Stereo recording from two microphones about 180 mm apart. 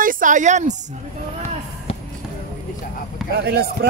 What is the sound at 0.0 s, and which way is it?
Speech, 50° right (ahead or behind).